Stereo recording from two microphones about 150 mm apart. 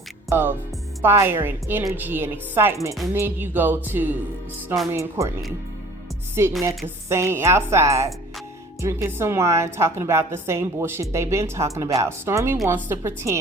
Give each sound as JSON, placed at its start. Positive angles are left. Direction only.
{"t": 0.3, "sound": "a woman's voice", "side_deg": -15}
{"t": 6.6, "sound": "a woman's voice", "side_deg": -20}